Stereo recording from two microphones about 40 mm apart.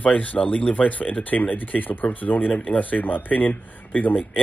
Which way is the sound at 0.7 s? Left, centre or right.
Left.